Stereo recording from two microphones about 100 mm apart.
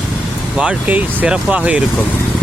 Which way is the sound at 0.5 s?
10° right (ahead or behind).